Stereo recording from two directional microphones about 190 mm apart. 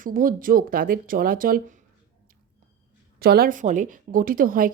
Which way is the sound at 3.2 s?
55° right (ahead or behind).